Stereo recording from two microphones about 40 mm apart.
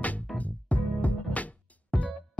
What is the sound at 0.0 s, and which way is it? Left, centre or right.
Music, left.